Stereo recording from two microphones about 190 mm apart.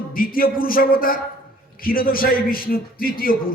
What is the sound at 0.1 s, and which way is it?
A man's voice, 50° left (ahead or behind).